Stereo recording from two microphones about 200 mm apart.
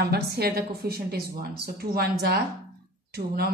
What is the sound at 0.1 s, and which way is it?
A woman's voice, 55° right (ahead or behind).